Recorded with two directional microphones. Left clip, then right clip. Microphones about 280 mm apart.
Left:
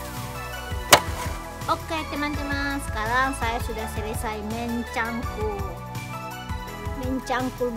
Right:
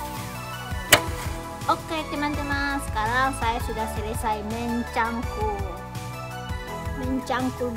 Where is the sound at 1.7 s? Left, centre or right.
Centre.